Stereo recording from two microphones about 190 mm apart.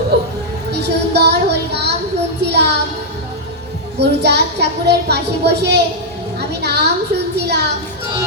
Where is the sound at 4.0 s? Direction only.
60° right (ahead or behind).